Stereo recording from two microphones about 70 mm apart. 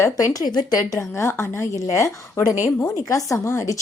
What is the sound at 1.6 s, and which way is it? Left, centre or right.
A woman's voice, left.